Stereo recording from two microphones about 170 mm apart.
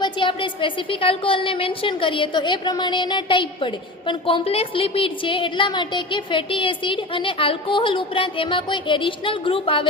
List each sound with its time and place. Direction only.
0.0 s a woman's voice: 30° left (ahead or behind)